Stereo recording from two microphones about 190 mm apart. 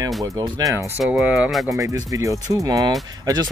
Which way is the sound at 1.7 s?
15° right (ahead or behind).